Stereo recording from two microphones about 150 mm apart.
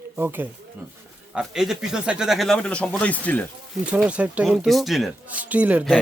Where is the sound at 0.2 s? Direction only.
15° right (ahead or behind).